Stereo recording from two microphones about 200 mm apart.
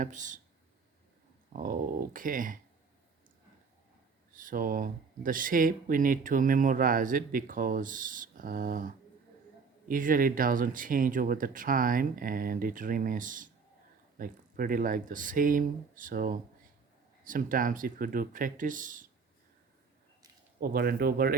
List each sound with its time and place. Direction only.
0.0 s speech: 40° right (ahead or behind)
1.5 s speech: 45° right (ahead or behind)
4.4 s speech: 45° right (ahead or behind)
9.9 s speech: 45° right (ahead or behind)
20.6 s speech: 50° right (ahead or behind)